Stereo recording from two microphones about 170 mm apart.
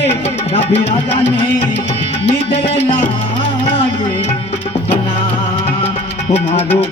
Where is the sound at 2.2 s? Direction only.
40° left (ahead or behind).